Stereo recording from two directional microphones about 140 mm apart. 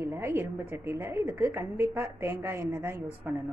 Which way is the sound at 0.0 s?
20° right (ahead or behind).